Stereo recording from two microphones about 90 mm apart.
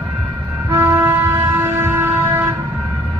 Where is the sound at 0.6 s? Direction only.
25° right (ahead or behind).